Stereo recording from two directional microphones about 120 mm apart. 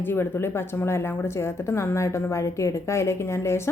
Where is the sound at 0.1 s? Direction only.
20° left (ahead or behind).